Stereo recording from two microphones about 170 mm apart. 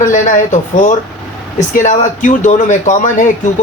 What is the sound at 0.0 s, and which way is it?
Speech, 45° left (ahead or behind).